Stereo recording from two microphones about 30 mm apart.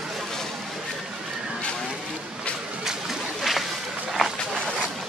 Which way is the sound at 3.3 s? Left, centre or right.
Centre.